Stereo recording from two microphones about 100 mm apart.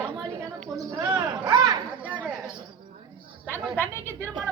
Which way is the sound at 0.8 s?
35° right (ahead or behind).